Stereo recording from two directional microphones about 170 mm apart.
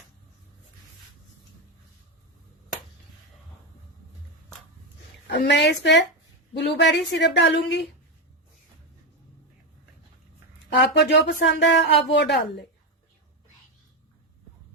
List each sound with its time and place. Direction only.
5.3 s a woman's voice: 80° left
6.5 s a woman's voice: 80° left
10.8 s speech: 80° left